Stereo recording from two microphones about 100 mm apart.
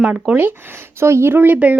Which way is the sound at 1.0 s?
25° right (ahead or behind).